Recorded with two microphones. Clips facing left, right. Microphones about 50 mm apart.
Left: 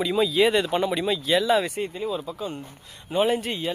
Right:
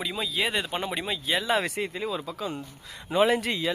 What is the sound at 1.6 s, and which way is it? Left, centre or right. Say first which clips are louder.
A man's voice: left 2 dB; right.